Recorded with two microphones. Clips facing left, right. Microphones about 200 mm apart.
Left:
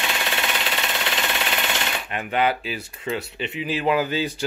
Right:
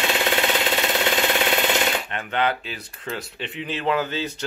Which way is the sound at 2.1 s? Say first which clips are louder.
Left 2 dB; 10° left (ahead or behind).